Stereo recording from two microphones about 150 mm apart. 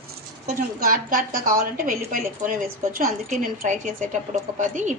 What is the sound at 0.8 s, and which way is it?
A woman's voice, 70° right (ahead or behind).